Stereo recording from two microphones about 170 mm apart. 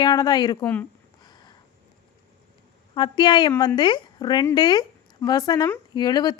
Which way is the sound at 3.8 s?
25° left (ahead or behind).